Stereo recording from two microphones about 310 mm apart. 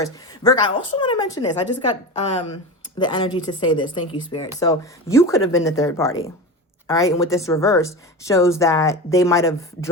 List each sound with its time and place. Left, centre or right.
0.0 s a woman's voice: centre